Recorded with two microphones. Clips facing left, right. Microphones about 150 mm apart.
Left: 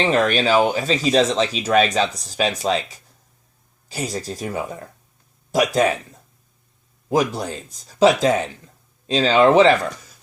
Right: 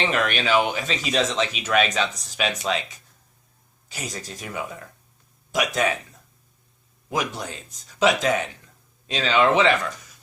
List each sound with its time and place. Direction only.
0.0 s speech: 35° left (ahead or behind)
7.1 s speech: 35° left (ahead or behind)